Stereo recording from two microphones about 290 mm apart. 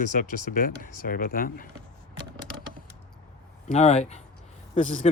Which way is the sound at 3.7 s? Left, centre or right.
Left.